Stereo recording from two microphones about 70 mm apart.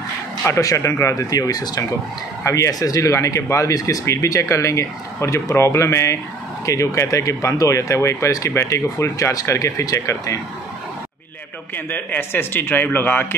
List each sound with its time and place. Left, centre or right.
0.5 s speech: left
2.4 s speech: left
2.7 s speech: left
8.3 s speech: left
8.5 s speech: left
11.7 s speech: left